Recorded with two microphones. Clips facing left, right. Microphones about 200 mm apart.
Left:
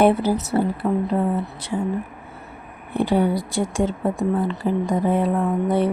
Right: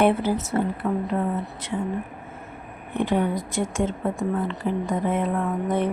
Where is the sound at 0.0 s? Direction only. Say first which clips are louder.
Left 3 dB; 40° left (ahead or behind).